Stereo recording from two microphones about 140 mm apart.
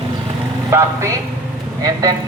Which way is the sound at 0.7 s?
20° right (ahead or behind).